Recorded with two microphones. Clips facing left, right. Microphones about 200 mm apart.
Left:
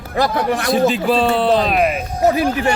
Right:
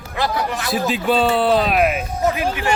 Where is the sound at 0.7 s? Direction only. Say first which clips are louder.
Left 2 dB; centre (ahead or behind).